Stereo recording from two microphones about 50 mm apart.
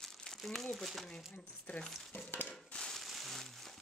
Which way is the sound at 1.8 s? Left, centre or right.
Centre.